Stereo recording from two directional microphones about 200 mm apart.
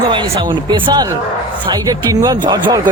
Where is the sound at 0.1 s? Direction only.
20° right (ahead or behind).